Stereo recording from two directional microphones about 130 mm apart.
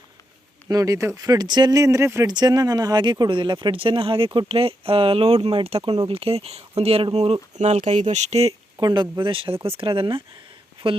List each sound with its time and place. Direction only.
0.7 s speech: 25° right (ahead or behind); by 8.5 s 55° right (ahead or behind)
8.8 s speech: 35° right (ahead or behind)